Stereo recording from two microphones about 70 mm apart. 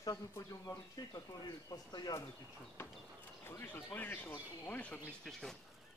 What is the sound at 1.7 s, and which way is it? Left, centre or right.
Speech, left.